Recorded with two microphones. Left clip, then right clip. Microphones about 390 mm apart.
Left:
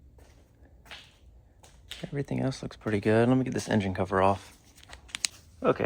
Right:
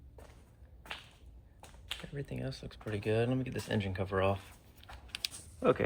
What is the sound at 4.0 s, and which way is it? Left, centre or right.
Speech, centre.